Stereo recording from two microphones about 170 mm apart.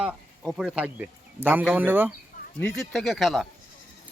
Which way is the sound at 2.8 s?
Centre (ahead or behind).